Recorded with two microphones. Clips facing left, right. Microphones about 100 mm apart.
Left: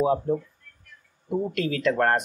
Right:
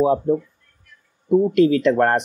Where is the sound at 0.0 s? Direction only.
25° right (ahead or behind).